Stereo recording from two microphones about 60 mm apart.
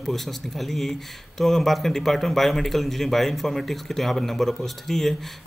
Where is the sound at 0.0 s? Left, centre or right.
Centre.